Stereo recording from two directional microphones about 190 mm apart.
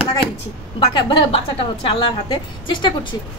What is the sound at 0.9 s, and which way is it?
Speech, 25° left (ahead or behind).